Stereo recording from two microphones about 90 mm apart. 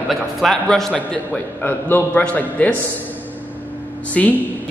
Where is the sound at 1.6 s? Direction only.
20° left (ahead or behind).